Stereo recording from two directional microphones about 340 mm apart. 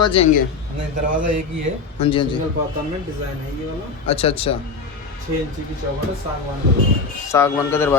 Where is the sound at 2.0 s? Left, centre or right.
Centre.